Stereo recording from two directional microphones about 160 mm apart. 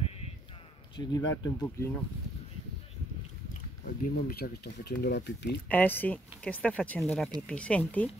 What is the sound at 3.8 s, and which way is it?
Speech, 70° left (ahead or behind).